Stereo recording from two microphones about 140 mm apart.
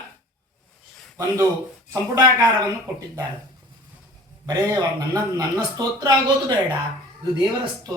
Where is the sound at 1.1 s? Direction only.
20° right (ahead or behind).